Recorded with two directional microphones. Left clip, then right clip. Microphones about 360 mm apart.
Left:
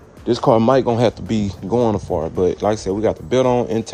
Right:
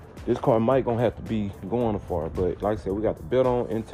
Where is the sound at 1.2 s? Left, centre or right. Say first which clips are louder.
Left 8 dB; left.